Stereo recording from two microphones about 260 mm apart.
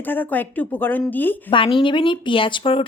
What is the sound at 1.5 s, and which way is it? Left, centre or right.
Speech, centre.